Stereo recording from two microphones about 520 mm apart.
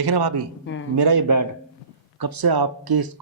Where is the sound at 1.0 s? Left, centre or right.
Right.